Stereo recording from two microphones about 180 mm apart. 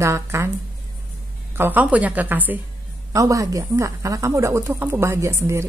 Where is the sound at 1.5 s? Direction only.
10° right (ahead or behind).